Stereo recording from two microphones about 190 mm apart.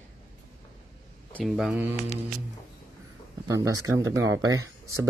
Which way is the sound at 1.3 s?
Centre (ahead or behind).